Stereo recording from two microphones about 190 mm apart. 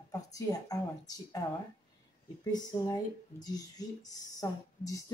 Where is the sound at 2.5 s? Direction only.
20° left (ahead or behind).